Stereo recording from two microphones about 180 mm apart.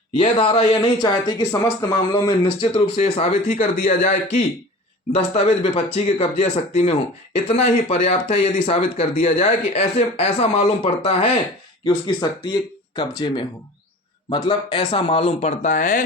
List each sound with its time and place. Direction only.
0.2 s speech: 25° left (ahead or behind); by 16.0 s 50° left (ahead or behind)